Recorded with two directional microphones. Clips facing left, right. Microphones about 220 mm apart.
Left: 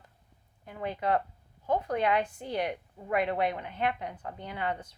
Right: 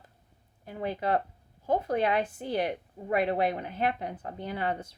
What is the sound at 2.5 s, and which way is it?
A woman's voice, 30° right (ahead or behind).